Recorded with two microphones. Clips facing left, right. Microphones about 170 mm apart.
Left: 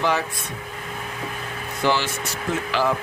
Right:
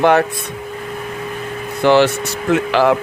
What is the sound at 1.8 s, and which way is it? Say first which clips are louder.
Speech: right 10 dB; 65° right (ahead or behind).